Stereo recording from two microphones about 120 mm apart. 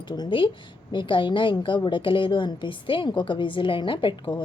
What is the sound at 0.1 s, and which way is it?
A woman's voice, 40° left (ahead or behind).